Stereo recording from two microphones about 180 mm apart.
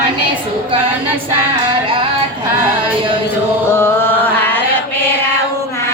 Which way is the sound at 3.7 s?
10° left (ahead or behind).